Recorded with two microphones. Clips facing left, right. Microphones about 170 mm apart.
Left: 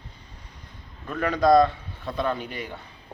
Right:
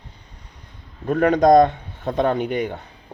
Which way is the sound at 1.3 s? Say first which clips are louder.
Right 4 dB; 70° right (ahead or behind).